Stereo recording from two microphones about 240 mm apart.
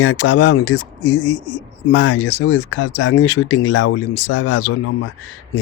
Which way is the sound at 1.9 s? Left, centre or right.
Left.